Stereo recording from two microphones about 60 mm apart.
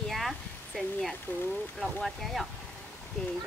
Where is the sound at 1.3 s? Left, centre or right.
Left.